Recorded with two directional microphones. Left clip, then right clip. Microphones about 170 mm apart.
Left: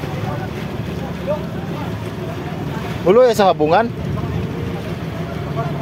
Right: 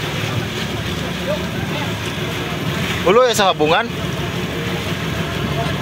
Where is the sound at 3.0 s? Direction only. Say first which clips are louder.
Left 2 dB; 30° left (ahead or behind).